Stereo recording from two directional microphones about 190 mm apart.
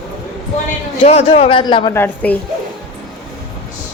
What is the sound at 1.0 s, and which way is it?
A woman's voice, 30° left (ahead or behind).